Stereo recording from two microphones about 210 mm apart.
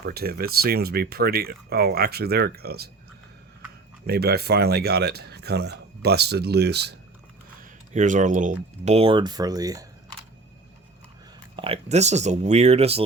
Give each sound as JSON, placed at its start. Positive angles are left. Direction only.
{"t": 0.0, "sound": "speech", "side_deg": -45}
{"t": 4.0, "sound": "speech", "side_deg": -50}
{"t": 7.6, "sound": "speech", "side_deg": -35}
{"t": 11.5, "sound": "speech", "side_deg": -25}